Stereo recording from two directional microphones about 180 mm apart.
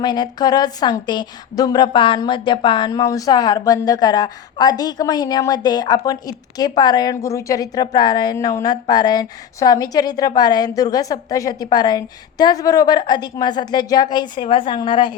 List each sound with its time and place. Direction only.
0.0 s a woman's voice: 20° left (ahead or behind)